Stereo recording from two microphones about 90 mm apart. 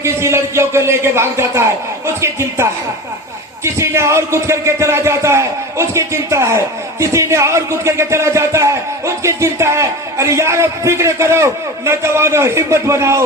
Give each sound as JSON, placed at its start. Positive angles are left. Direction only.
{"t": 0.0, "sound": "a man's voice", "side_deg": -30}